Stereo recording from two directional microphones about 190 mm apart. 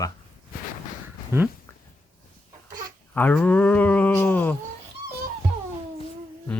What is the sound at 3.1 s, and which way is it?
Speech, 10° left (ahead or behind).